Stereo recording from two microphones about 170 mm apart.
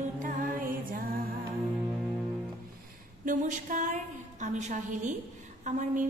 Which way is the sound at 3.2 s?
50° right (ahead or behind).